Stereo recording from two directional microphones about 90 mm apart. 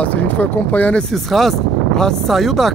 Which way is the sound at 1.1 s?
Centre (ahead or behind).